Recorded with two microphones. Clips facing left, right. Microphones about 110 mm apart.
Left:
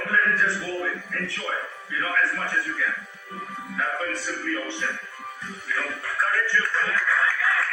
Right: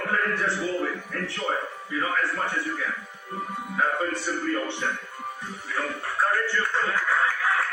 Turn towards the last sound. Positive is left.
turn(degrees=-30)  # may be behind; listen again after turning